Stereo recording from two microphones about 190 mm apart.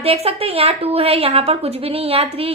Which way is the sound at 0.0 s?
30° right (ahead or behind).